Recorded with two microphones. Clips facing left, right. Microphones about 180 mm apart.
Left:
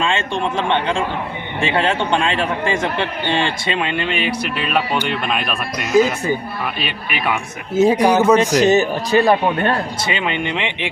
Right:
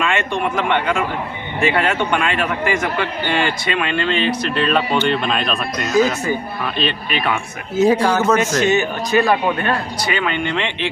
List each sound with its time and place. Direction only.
0.0 s a man's voice: 25° left (ahead or behind)
8.6 s a man's voice: 35° left (ahead or behind); by 10.8 s 15° left (ahead or behind)